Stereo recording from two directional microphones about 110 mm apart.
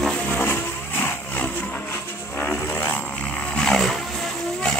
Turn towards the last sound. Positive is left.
turn(degrees=5)  # may be behind; listen again after turning